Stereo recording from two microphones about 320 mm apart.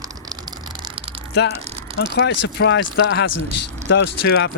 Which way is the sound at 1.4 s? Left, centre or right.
Left.